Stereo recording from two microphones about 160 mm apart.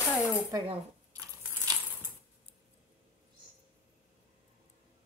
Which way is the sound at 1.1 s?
20° right (ahead or behind).